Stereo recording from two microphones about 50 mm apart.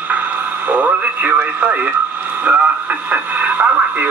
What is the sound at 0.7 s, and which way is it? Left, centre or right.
Radio, right.